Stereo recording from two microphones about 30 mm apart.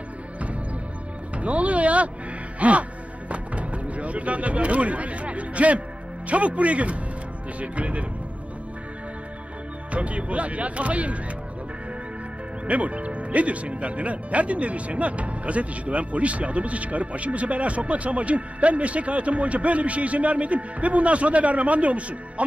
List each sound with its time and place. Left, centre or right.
1.3 s music: right
2.6 s speech: right
3.3 s music: right
6.2 s speech: right
9.9 s speech: right
12.6 s speech: right